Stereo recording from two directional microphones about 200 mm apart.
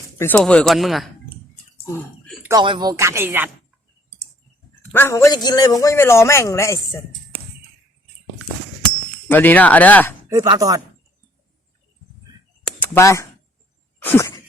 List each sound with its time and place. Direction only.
0.2 s speech: 5° left (ahead or behind)
1.9 s a sound: 5° left (ahead or behind)
2.4 s speech: 20° right (ahead or behind)
4.9 s a man's voice: 10° left (ahead or behind)
9.3 s a man's voice: 10° left (ahead or behind)
10.2 s speech: 15° right (ahead or behind)
12.6 s a sound: 10° left (ahead or behind)